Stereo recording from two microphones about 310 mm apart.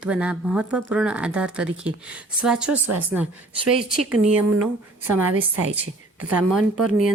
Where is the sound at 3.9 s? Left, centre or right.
Right.